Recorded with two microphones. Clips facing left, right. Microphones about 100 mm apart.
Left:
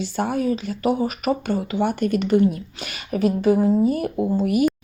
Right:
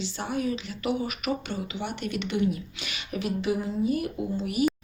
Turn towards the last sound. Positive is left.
turn(degrees=50)  # may be behind; listen again after turning